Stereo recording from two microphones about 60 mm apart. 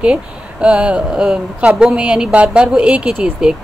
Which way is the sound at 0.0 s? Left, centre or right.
Centre.